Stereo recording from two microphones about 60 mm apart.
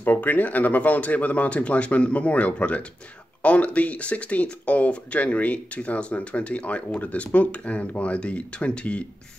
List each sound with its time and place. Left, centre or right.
0.0 s speech: left